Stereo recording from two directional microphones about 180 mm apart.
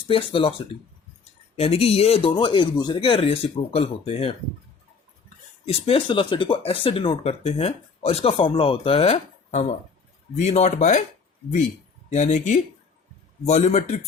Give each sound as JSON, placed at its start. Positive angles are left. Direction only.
{"t": 0.1, "sound": "speech", "side_deg": 30}
{"t": 1.5, "sound": "speech", "side_deg": 35}
{"t": 5.6, "sound": "speech", "side_deg": 30}
{"t": 12.1, "sound": "speech", "side_deg": 40}